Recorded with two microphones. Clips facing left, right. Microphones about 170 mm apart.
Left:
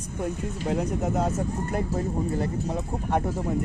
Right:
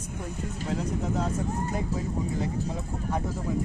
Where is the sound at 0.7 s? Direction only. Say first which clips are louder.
Left 4 dB; 55° left (ahead or behind).